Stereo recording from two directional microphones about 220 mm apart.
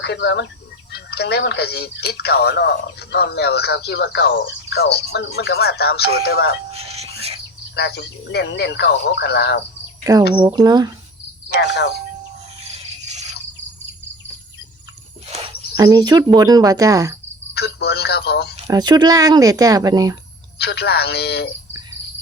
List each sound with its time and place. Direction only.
0.0 s speech: 50° left (ahead or behind)
6.7 s music: 25° right (ahead or behind)
7.8 s speech: 50° left (ahead or behind)
10.3 s speech: 20° right (ahead or behind)
11.4 s speech: 50° left (ahead or behind)
12.7 s a sound: 30° right (ahead or behind)
15.3 s speech: 25° right (ahead or behind)
17.5 s speech: 45° left (ahead or behind)
18.7 s speech: 20° right (ahead or behind)
20.6 s speech: 45° left (ahead or behind)